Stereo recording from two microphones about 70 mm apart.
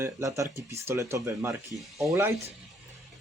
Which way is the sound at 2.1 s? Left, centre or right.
Right.